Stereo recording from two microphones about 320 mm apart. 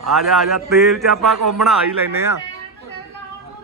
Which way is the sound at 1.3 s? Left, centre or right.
Right.